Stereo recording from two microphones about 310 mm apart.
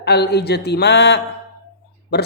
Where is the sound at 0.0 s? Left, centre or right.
Left.